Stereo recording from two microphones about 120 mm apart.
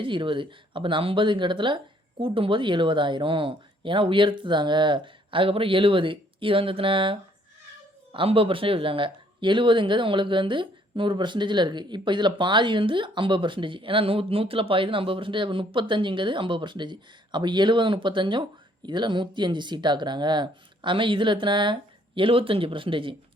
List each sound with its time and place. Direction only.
0.0 s speech: 45° right (ahead or behind)